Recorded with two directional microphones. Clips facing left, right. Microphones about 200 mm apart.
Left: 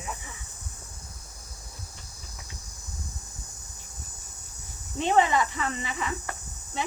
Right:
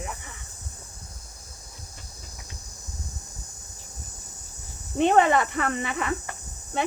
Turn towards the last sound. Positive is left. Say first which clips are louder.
# right 5 dB
turn(degrees=-60)  # may be behind; listen again after turning